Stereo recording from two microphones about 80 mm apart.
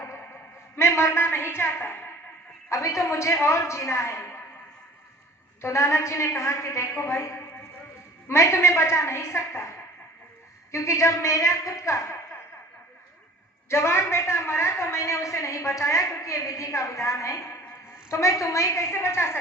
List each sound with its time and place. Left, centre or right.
0.8 s a woman's voice: left
2.6 s a woman's voice: left
5.6 s a woman's voice: left
13.7 s a woman's voice: left